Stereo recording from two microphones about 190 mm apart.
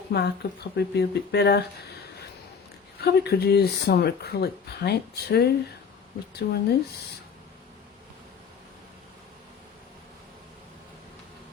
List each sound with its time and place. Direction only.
0.1 s speech: 60° left (ahead or behind)
3.0 s speech: 60° left (ahead or behind)